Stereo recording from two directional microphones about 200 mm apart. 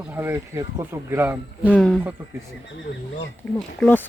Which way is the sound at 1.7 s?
Centre (ahead or behind).